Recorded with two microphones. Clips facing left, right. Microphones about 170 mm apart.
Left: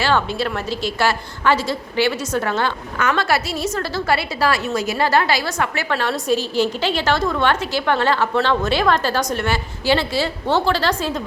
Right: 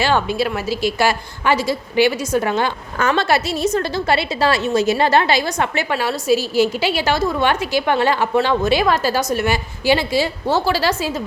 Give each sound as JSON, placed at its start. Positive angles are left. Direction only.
{"t": 0.0, "sound": "a woman's voice", "side_deg": -15}
{"t": 3.0, "sound": "a woman's voice", "side_deg": -25}
{"t": 6.0, "sound": "a woman's voice", "side_deg": -5}